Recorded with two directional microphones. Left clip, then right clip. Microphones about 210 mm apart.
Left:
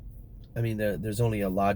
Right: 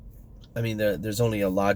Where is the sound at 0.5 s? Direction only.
15° right (ahead or behind).